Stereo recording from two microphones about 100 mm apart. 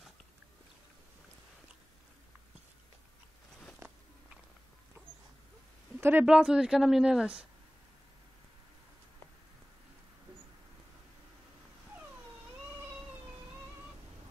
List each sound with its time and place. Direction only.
3.8 s biting: 30° right (ahead or behind)
5.9 s a sound: 20° right (ahead or behind)
6.2 s speech: 10° right (ahead or behind)